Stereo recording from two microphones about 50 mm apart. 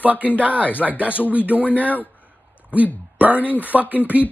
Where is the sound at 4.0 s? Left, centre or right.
Left.